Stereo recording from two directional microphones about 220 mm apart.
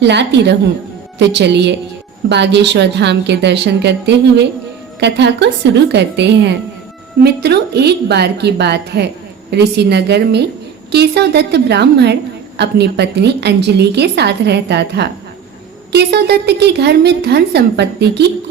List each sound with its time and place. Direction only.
0.0 s a woman's voice: 50° right (ahead or behind)